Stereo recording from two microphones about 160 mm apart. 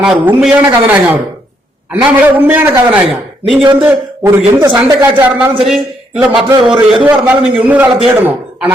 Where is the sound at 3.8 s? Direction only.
15° right (ahead or behind).